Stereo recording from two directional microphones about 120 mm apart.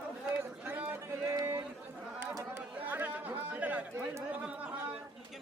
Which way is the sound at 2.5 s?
15° right (ahead or behind).